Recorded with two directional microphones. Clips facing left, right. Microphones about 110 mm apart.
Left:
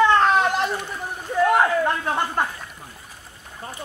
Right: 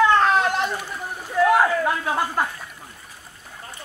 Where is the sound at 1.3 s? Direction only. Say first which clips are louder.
Even; centre (ahead or behind).